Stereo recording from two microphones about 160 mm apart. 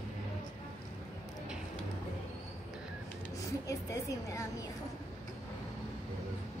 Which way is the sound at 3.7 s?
20° left (ahead or behind).